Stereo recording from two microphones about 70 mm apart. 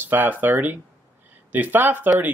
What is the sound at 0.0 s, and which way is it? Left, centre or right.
Speech, right.